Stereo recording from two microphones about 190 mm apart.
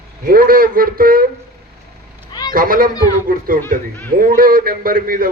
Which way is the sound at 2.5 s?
50° right (ahead or behind).